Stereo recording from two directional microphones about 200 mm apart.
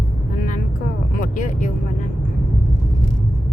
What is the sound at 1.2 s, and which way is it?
Vehicle, 40° left (ahead or behind).